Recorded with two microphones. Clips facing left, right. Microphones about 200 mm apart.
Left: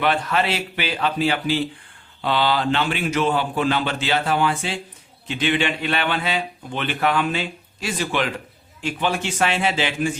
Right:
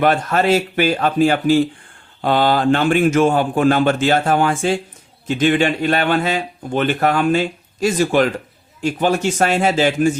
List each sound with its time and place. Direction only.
0.0 s a man's voice: 45° right (ahead or behind)